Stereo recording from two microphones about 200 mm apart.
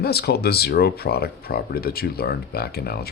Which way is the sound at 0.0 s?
50° left (ahead or behind).